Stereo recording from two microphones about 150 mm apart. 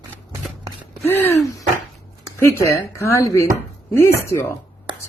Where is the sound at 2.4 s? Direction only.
20° left (ahead or behind).